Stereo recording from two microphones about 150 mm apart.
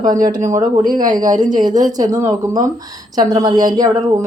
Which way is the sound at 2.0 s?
25° right (ahead or behind).